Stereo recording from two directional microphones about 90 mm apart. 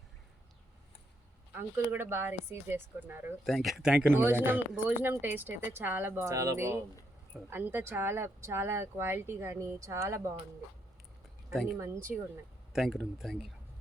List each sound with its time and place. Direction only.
1.5 s speech: 25° right (ahead or behind)
3.4 s speech: centre (ahead or behind)
4.1 s speech: 25° right (ahead or behind)
6.2 s speech: 35° right (ahead or behind)
11.5 s speech: 5° right (ahead or behind)